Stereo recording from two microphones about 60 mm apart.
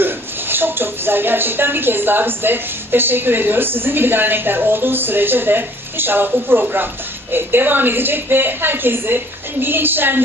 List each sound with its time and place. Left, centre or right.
0.0 s speech: right